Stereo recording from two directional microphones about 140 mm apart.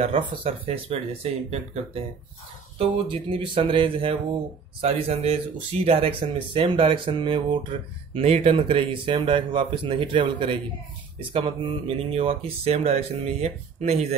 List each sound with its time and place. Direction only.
0.0 s speech: 45° right (ahead or behind)